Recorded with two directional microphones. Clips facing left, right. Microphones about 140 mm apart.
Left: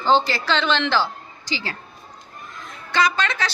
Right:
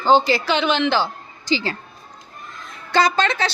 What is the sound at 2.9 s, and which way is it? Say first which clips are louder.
Speech: right 3 dB; 35° right (ahead or behind).